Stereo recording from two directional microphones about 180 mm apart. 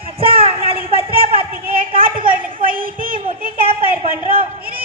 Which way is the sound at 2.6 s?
50° right (ahead or behind).